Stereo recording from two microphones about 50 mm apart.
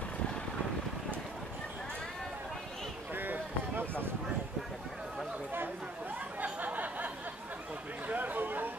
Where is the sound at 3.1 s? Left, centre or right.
Right.